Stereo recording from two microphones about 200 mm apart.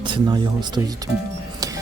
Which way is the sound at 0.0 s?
25° right (ahead or behind).